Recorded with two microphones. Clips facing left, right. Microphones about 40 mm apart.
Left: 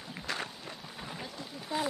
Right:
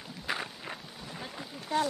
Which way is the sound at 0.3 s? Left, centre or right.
Centre.